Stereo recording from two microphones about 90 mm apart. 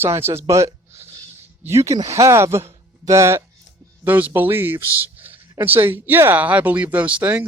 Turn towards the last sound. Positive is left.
turn(degrees=-15)  # may be behind; listen again after turning